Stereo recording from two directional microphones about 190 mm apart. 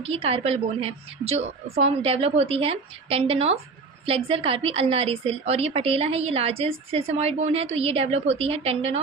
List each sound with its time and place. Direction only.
0.0 s a woman's voice: 30° right (ahead or behind)